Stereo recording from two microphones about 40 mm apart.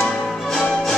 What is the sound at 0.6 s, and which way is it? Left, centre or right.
Music, centre.